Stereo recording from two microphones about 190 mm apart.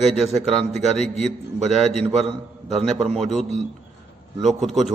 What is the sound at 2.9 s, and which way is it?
Speech, 35° right (ahead or behind).